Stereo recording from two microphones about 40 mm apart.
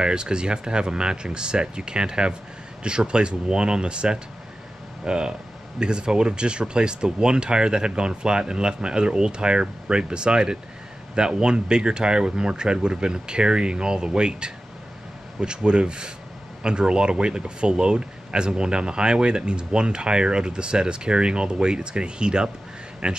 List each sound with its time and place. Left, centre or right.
0.0 s speech: right